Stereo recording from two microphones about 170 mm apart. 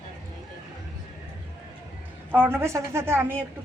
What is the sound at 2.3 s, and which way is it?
A woman's voice, 10° right (ahead or behind).